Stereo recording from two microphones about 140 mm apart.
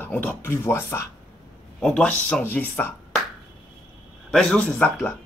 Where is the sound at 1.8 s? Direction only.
5° left (ahead or behind).